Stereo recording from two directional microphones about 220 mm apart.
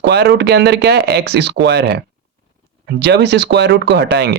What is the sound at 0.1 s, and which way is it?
Speech, 50° right (ahead or behind).